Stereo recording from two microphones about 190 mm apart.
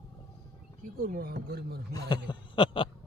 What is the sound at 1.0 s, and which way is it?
Speech, 50° right (ahead or behind).